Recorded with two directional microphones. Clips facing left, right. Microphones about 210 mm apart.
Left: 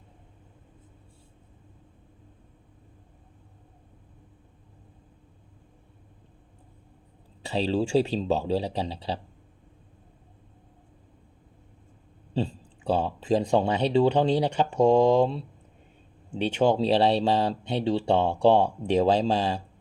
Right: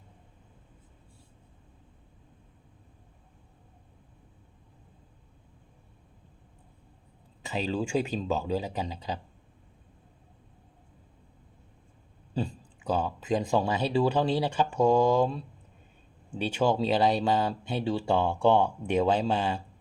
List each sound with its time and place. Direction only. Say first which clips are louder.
7.4 s speech: left 5 dB; 35° left (ahead or behind)
12.3 s speech: left 3 dB; 30° left (ahead or behind)